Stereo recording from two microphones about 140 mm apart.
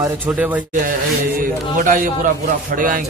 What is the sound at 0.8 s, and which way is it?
Mantra, 80° right.